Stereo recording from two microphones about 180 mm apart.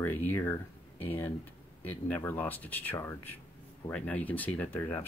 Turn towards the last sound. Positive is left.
turn(degrees=15)  # may be behind; listen again after turning